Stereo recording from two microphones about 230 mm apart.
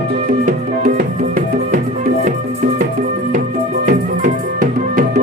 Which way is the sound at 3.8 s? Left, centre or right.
Right.